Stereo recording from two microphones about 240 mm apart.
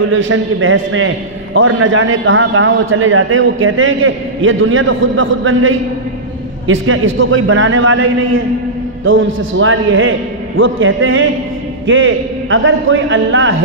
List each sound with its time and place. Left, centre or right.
0.1 s a man's voice: right
7.2 s a man's voice: right